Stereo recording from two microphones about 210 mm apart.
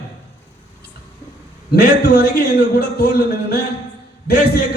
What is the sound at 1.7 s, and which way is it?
Speech, 50° left (ahead or behind).